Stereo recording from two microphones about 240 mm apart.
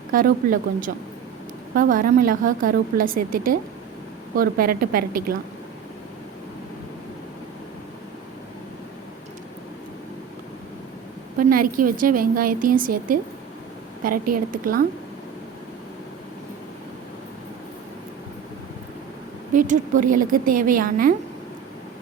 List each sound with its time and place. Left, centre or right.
0.1 s a woman's voice: right
11.3 s a woman's voice: right
14.3 s a woman's voice: right
19.5 s a woman's voice: right